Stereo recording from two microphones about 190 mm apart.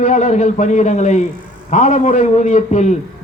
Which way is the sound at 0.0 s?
40° left (ahead or behind).